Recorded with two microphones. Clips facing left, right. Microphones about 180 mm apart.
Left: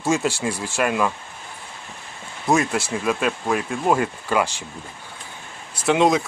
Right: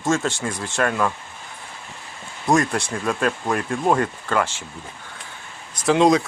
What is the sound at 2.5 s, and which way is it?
Speech, 5° left (ahead or behind).